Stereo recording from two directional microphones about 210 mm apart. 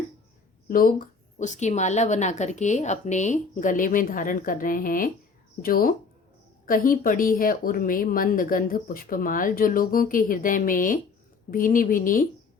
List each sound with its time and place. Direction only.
0.7 s a woman's voice: 40° left (ahead or behind)